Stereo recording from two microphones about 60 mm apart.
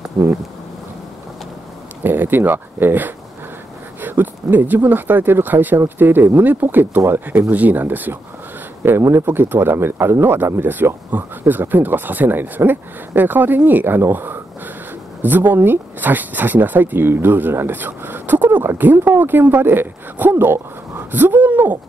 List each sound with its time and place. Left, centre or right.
2.0 s speech: right
4.0 s a sound: right
4.8 s speech: right